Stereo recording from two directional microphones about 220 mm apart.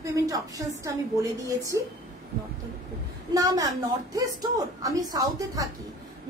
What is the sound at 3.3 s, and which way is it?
A woman's voice, 15° right (ahead or behind).